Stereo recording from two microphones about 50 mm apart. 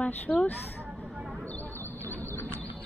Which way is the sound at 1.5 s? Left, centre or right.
Left.